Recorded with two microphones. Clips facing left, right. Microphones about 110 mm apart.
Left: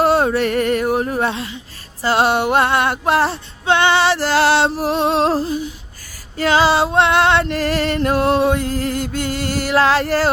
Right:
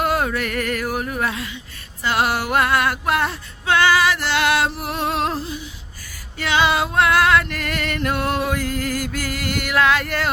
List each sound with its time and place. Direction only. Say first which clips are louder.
0.0 s a sound: left 6 dB; 30° left (ahead or behind)
2.0 s female singing: left 5 dB; 30° left (ahead or behind)
5.4 s humming: left 9 dB; 40° left (ahead or behind)
6.3 s female singing: left 5 dB; 35° left (ahead or behind)